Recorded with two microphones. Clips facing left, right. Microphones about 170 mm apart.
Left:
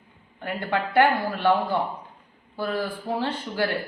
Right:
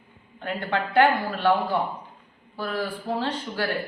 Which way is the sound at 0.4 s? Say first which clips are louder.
Even; 15° left (ahead or behind).